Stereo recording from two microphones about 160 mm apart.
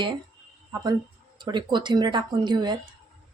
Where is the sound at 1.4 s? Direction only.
30° right (ahead or behind).